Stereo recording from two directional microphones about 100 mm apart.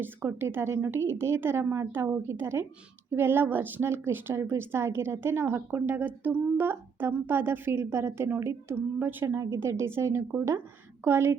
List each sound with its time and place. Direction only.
0.0 s a woman's voice: 20° right (ahead or behind)